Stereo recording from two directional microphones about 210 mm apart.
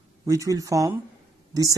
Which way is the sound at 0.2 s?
15° right (ahead or behind).